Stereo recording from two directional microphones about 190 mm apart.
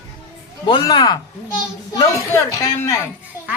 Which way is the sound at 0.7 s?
25° left (ahead or behind).